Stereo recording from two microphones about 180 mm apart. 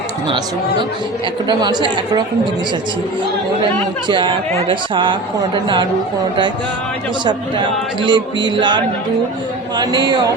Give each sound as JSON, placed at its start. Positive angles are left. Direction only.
{"t": 1.5, "sound": "speech", "side_deg": -25}
{"t": 4.1, "sound": "speech", "side_deg": -25}
{"t": 7.3, "sound": "speech", "side_deg": -25}